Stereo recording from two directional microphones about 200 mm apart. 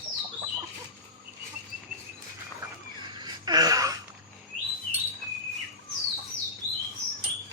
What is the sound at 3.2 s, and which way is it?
Wail, 20° right (ahead or behind).